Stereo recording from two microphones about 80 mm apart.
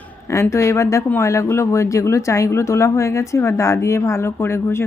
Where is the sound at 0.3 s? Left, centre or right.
Left.